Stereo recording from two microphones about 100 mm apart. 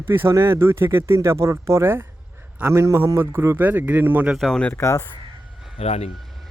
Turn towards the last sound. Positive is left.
turn(degrees=90)